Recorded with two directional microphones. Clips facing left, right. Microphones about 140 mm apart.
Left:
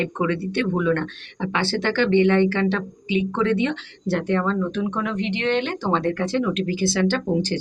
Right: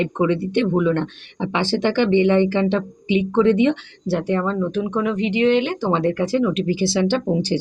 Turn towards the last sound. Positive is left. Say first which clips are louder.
# right 2 dB
turn(degrees=-15)  # may be behind; listen again after turning